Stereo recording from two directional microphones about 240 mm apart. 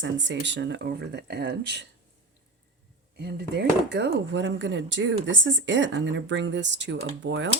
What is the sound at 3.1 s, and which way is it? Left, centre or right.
Speech, right.